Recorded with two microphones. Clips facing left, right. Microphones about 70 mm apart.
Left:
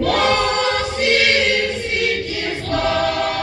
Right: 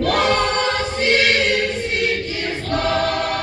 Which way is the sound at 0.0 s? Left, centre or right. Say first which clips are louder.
Left 1 dB; right.